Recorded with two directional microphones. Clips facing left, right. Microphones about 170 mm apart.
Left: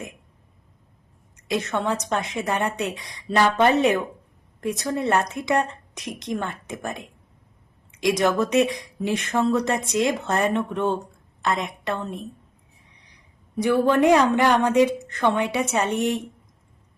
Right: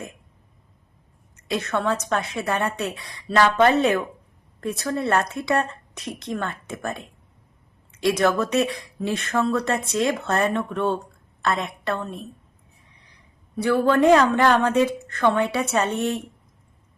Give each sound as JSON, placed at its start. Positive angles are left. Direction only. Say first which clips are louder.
{"t": 1.4, "sound": "speech", "louder": "even", "side_deg": 15}
{"t": 13.6, "sound": "speech", "louder": "even", "side_deg": 15}